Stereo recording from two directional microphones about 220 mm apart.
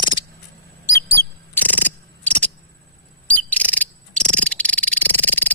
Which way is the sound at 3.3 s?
5° left (ahead or behind).